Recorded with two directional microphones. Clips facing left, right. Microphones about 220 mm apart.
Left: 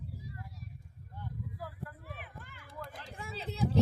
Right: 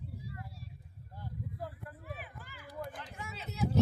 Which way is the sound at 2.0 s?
Centre (ahead or behind).